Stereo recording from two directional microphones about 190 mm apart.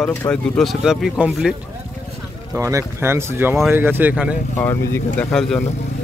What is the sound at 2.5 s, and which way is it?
Speech, 15° right (ahead or behind).